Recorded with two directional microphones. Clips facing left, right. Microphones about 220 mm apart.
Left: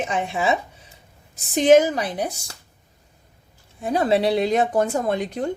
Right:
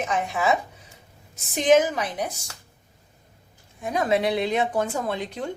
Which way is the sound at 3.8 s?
30° left (ahead or behind).